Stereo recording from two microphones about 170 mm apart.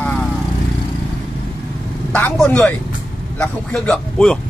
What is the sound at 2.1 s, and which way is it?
Speech, 5° left (ahead or behind).